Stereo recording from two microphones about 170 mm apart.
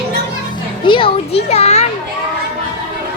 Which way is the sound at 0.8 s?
30° left (ahead or behind).